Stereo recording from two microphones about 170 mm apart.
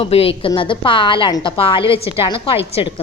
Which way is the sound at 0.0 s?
35° left (ahead or behind).